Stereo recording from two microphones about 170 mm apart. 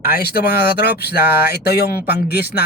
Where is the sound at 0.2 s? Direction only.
65° left (ahead or behind).